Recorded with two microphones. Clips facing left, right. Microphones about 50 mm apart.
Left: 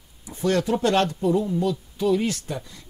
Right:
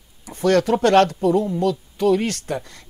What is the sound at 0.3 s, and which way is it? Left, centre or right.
Speech, right.